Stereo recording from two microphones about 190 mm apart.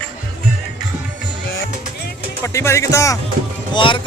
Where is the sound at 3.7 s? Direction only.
25° left (ahead or behind).